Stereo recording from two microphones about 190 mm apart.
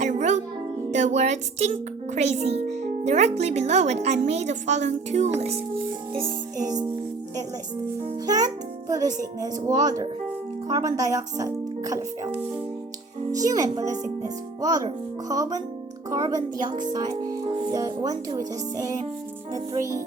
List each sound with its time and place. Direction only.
0.0 s music: 40° right (ahead or behind)
0.9 s speech: 40° right (ahead or behind)
6.2 s speech: 20° right (ahead or behind)
8.3 s speech: 20° right (ahead or behind)
13.3 s speech: 20° right (ahead or behind)